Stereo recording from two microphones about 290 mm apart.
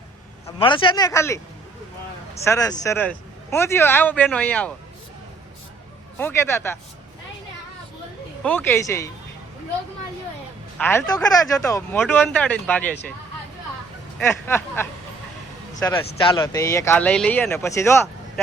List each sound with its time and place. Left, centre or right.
0.4 s speech: centre
2.4 s speech: centre
6.1 s speech: centre
8.4 s speech: centre
10.8 s speech: centre
14.2 s speech: centre